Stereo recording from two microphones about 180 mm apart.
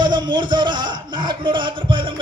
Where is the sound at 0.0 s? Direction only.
25° right (ahead or behind).